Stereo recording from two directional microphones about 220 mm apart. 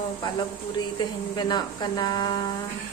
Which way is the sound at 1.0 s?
20° left (ahead or behind).